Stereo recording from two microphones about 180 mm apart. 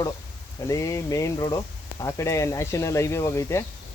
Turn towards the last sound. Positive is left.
turn(degrees=15)  # may be behind; listen again after turning